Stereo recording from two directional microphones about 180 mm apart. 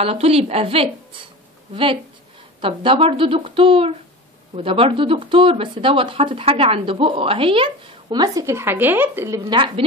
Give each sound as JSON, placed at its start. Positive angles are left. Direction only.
{"t": 0.0, "sound": "a woman's voice", "side_deg": -35}
{"t": 2.6, "sound": "speech", "side_deg": -30}